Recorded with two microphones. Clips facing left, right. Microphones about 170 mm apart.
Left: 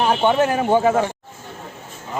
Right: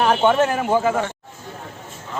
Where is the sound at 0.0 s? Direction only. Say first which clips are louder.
Even; 15° left (ahead or behind).